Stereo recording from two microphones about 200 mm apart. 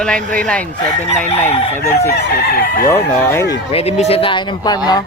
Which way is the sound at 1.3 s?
30° left (ahead or behind).